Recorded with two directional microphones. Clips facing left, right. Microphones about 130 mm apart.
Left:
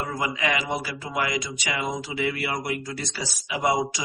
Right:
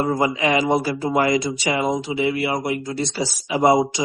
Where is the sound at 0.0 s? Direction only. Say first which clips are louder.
Right 8 dB; 30° right (ahead or behind).